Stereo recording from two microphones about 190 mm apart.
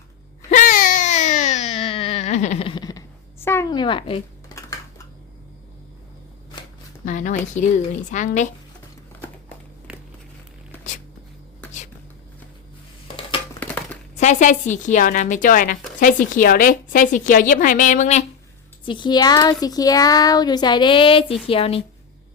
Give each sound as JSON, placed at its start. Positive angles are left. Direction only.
{"t": 0.5, "sound": "baby cry", "side_deg": 45}
{"t": 7.0, "sound": "a woman's voice", "side_deg": 40}
{"t": 14.2, "sound": "a woman's voice", "side_deg": 40}
{"t": 18.9, "sound": "speech", "side_deg": 25}